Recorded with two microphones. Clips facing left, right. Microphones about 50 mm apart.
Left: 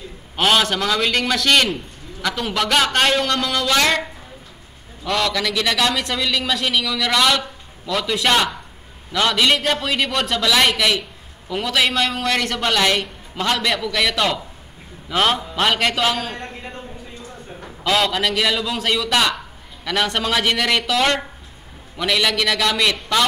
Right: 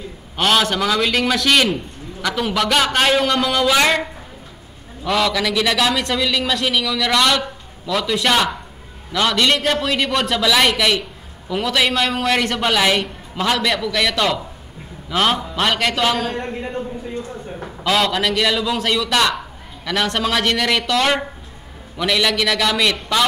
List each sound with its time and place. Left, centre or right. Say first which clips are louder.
0.4 s a man's voice: right 1 dB; centre
5.0 s a man's voice: right 2 dB; centre
16.3 s speech: right 7 dB; centre
17.8 s a man's voice: right 1 dB; centre